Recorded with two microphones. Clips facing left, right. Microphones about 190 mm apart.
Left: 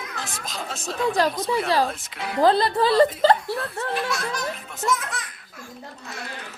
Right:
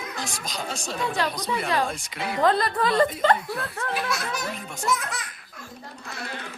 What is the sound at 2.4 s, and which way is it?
Speech, 30° left (ahead or behind).